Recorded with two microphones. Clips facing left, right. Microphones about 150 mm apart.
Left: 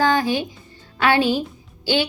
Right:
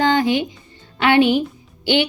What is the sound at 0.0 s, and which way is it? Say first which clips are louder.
Music: right 2 dB; 20° right (ahead or behind).